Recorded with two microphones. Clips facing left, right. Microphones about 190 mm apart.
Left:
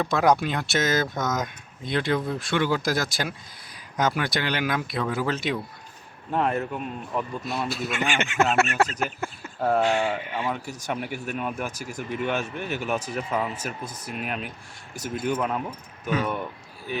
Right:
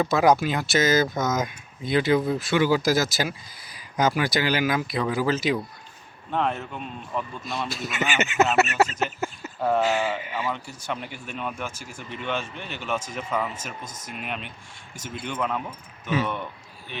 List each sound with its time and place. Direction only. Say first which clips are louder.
0.0 s speech: right 2 dB; 5° right (ahead or behind)
10.5 s speech: left 2 dB; 10° left (ahead or behind)
13.8 s speech: left 3 dB; 35° left (ahead or behind)
14.1 s speech: left 2 dB; centre (ahead or behind)
14.9 s speech: left 7 dB; 40° left (ahead or behind)
15.4 s speech: left 1 dB; 5° left (ahead or behind)